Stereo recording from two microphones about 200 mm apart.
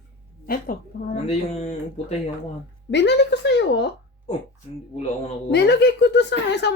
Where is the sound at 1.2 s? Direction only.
35° left (ahead or behind).